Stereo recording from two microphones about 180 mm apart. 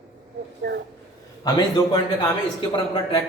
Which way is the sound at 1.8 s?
20° left (ahead or behind).